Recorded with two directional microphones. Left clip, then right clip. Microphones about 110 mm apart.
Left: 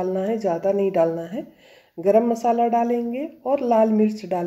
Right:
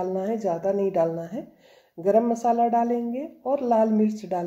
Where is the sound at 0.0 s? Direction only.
25° left (ahead or behind).